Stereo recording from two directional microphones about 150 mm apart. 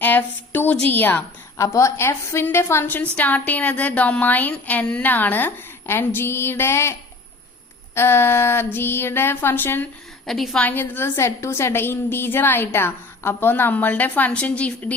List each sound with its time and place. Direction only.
0.0 s a sound: 10° left (ahead or behind)
0.9 s a woman's voice: 15° left (ahead or behind)
7.9 s a woman's voice: 15° left (ahead or behind)
10.2 s a woman's voice: centre (ahead or behind)